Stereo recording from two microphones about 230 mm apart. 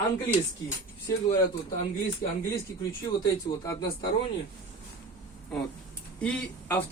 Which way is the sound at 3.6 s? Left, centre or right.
Centre.